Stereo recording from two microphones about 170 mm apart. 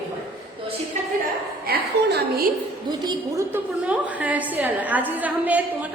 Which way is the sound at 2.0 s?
80° right.